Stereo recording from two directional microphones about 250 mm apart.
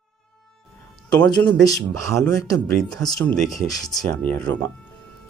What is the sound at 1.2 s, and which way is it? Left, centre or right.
Speech, centre.